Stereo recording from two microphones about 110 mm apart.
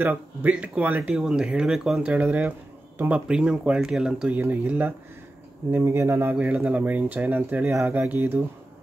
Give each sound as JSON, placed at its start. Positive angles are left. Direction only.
{"t": 0.0, "sound": "speech", "side_deg": -15}
{"t": 2.1, "sound": "speech", "side_deg": -15}
{"t": 6.3, "sound": "speech", "side_deg": -10}